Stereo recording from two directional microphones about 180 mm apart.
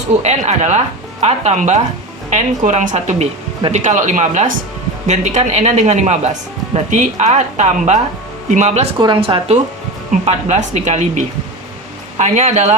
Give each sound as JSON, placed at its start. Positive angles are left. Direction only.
{"t": 0.2, "sound": "speech", "side_deg": -40}
{"t": 12.1, "sound": "speech", "side_deg": -40}